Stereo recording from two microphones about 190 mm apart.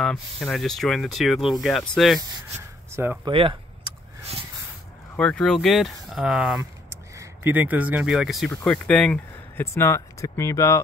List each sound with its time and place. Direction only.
0.0 s speech: 5° left (ahead or behind)
3.3 s vehicle: 25° right (ahead or behind)
5.1 s speech: 5° left (ahead or behind)